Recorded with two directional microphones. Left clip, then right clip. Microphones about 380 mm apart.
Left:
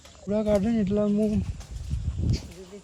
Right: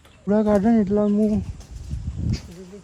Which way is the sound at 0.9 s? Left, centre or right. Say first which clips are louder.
Right 5 dB; right.